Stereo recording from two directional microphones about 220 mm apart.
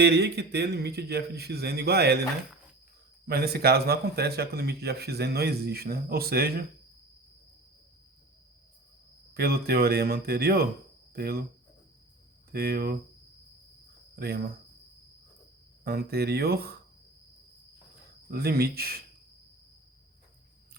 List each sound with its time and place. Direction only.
0.0 s speech: 50° right (ahead or behind)
3.2 s speech: 45° right (ahead or behind)
9.3 s speech: 45° right (ahead or behind)
12.5 s speech: 45° right (ahead or behind)
14.2 s speech: 45° right (ahead or behind)
15.8 s speech: 45° right (ahead or behind)
18.3 s speech: 45° right (ahead or behind)